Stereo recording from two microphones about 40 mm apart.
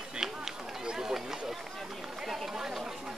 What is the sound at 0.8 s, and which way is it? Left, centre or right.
Run, centre.